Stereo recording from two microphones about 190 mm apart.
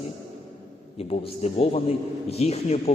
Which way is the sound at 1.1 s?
35° left (ahead or behind).